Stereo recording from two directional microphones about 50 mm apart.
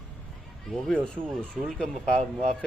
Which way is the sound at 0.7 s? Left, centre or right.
Centre.